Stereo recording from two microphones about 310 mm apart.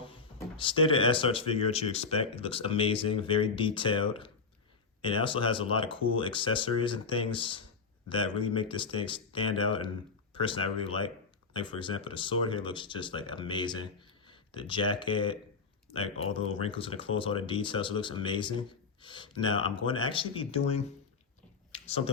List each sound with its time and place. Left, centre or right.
0.5 s speech: centre
21.8 s speech: centre